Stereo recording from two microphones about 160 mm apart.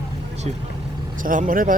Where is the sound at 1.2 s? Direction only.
60° right (ahead or behind).